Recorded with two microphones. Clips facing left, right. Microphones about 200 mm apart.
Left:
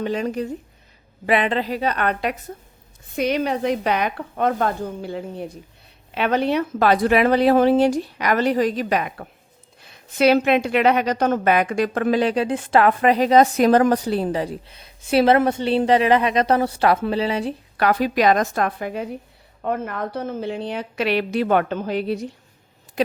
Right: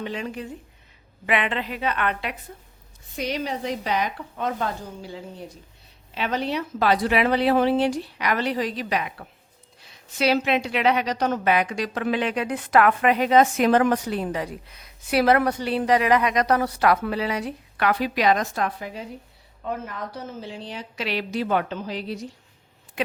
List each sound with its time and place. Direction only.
0.0 s a woman's voice: 40° left (ahead or behind)
3.2 s a woman's voice: 55° left (ahead or behind)
12.2 s a woman's voice: 30° left (ahead or behind); by 22.4 s 60° left (ahead or behind)